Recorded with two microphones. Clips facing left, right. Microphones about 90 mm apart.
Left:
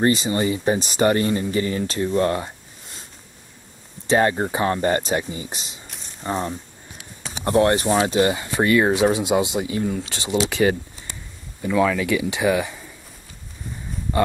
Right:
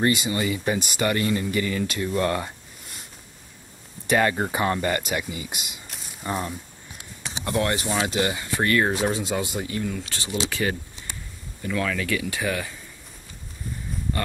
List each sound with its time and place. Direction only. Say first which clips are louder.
0.0 s speech: left 4 dB; 30° left (ahead or behind)
4.1 s speech: left 3 dB; 30° left (ahead or behind)
8.6 s speech: left 5 dB; 15° left (ahead or behind)